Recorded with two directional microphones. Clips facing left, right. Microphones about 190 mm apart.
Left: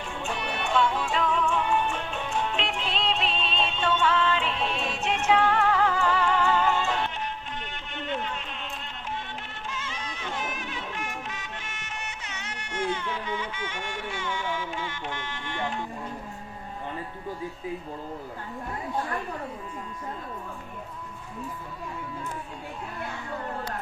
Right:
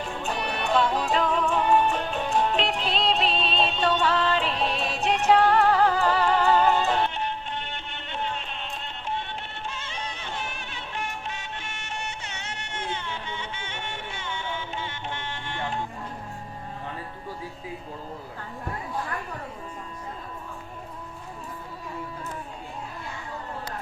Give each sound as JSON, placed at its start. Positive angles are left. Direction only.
{"t": 0.0, "sound": "music", "side_deg": -35}
{"t": 9.6, "sound": "music", "side_deg": -30}